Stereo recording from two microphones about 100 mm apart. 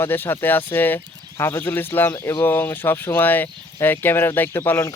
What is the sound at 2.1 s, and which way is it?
Speech, 30° left (ahead or behind).